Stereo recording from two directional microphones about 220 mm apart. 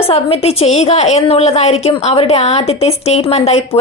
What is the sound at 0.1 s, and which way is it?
A woman's voice, 25° left (ahead or behind).